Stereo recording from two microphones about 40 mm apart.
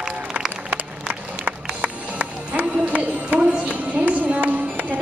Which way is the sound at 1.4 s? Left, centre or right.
Right.